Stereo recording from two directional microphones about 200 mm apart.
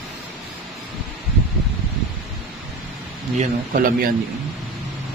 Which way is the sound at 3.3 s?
40° right (ahead or behind).